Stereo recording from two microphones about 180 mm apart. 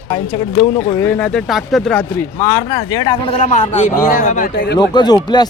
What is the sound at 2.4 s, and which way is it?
Speech, 20° left (ahead or behind).